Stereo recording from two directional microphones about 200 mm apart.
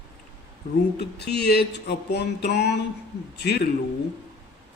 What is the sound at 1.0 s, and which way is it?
Music, 55° left (ahead or behind).